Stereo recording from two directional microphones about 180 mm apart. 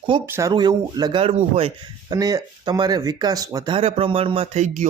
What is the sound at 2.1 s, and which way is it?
Speech, 20° right (ahead or behind).